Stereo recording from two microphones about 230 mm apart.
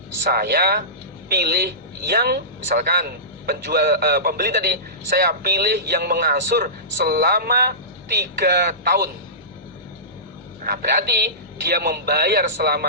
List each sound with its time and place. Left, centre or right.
0.3 s speech: right
10.6 s speech: right